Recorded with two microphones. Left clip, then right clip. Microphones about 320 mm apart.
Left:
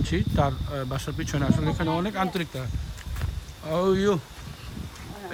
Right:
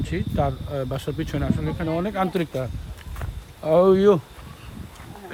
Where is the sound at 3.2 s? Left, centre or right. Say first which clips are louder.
Right 9 dB; centre.